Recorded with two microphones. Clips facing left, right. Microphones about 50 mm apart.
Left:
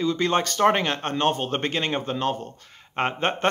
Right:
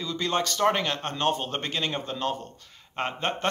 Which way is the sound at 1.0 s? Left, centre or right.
Left.